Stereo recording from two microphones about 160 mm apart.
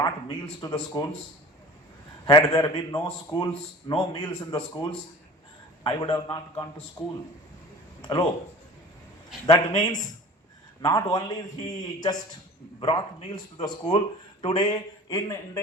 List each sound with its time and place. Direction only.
0.0 s a man's voice: 25° left (ahead or behind)
2.2 s a man's voice: 30° left (ahead or behind)
9.5 s a man's voice: 25° left (ahead or behind)